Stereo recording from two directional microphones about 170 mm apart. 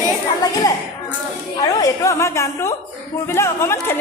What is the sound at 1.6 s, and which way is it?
Speech, 20° left (ahead or behind).